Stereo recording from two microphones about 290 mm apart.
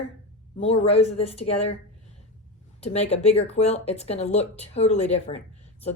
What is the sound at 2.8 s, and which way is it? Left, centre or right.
Speech, left.